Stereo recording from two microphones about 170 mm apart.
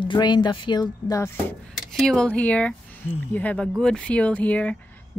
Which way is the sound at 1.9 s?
5° left (ahead or behind).